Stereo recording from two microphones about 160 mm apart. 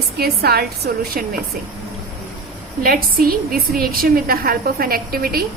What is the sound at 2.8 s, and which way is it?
A woman's voice, 65° right (ahead or behind).